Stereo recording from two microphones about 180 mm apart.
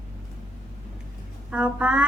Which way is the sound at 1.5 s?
5° right (ahead or behind).